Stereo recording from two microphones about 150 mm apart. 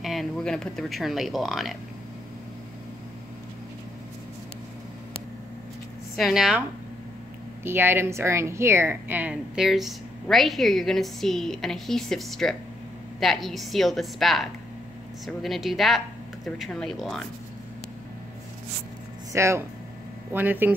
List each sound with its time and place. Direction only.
0.0 s a woman's voice: centre (ahead or behind)
6.1 s a woman's voice: centre (ahead or behind)
7.6 s a woman's voice: 15° right (ahead or behind); by 17.3 s centre (ahead or behind)
19.3 s speech: 20° right (ahead or behind)